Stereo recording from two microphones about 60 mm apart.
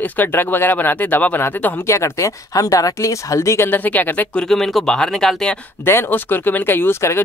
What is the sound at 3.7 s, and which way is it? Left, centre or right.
Speech, left.